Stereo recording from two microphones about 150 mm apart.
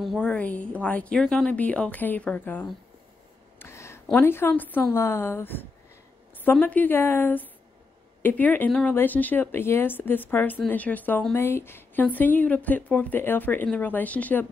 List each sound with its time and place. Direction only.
0.0 s a woman's voice: 5° left (ahead or behind)
3.5 s a sound: 15° left (ahead or behind)
4.1 s a woman's voice: 15° left (ahead or behind)